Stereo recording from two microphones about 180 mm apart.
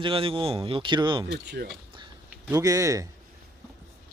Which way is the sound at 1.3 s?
65° right (ahead or behind).